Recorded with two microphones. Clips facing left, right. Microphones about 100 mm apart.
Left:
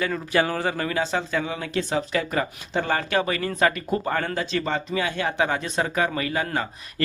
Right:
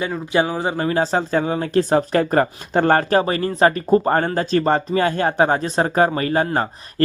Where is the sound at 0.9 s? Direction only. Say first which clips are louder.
Right 6 dB; 35° right (ahead or behind).